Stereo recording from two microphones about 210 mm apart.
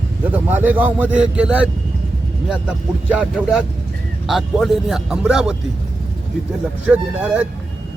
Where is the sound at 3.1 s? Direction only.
5° right (ahead or behind).